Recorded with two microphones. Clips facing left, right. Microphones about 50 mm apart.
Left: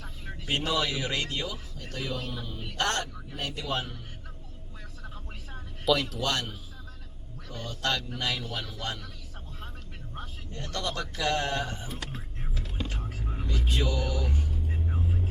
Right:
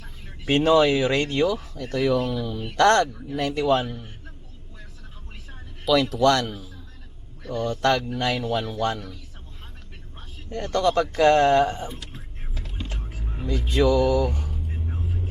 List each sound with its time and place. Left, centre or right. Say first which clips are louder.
0.4 s a man's voice: right 11 dB; right
6.1 s a man's voice: right 11 dB; right
10.5 s a man's voice: right 13 dB; right
12.5 s vehicle: even; centre
13.5 s a man's voice: right 11 dB; right